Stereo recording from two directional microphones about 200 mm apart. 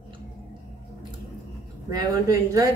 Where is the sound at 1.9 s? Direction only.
15° right (ahead or behind).